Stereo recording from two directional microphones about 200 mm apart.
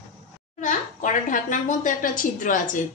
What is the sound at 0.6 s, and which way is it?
Speech, 40° left (ahead or behind).